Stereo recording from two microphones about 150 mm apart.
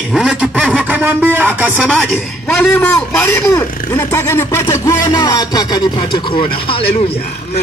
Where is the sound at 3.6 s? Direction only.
15° left (ahead or behind).